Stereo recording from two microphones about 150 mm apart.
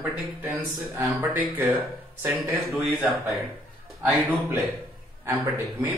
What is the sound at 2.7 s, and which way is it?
Speech, centre (ahead or behind).